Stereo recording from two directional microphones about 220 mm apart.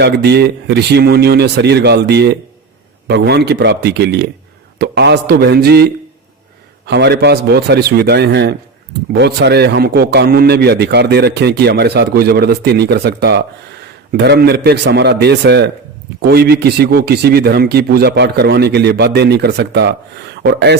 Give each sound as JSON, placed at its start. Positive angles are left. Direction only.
{"t": 0.0, "sound": "a man's voice", "side_deg": -50}